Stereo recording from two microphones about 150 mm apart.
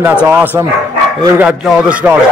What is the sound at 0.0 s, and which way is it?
Speech, 10° right (ahead or behind).